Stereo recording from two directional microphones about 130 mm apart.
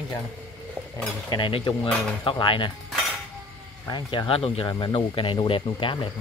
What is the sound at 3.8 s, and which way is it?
Speech, 35° left (ahead or behind).